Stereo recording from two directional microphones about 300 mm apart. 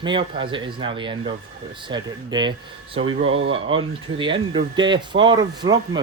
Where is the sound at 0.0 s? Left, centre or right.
Centre.